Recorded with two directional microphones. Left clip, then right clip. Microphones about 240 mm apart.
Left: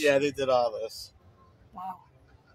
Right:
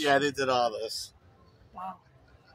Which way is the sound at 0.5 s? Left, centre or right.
Right.